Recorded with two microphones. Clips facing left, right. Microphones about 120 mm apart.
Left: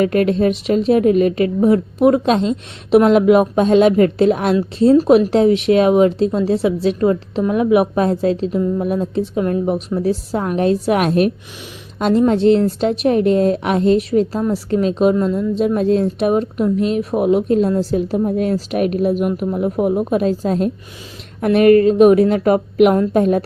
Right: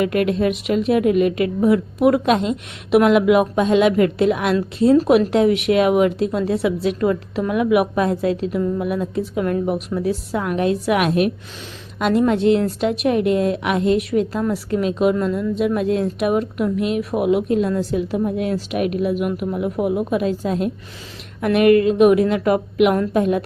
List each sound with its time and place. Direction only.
0.0 s a woman's voice: 35° left (ahead or behind)